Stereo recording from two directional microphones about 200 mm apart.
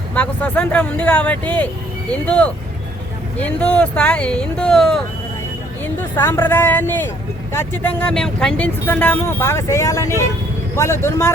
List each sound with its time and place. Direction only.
0.1 s speech: 5° left (ahead or behind)
3.6 s speech: 5° left (ahead or behind)